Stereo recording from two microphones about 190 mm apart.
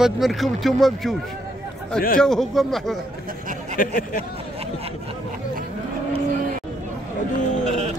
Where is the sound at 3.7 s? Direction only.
50° left (ahead or behind).